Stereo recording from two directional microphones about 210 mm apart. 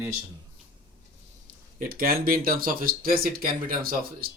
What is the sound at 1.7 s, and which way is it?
Speech, 45° right (ahead or behind).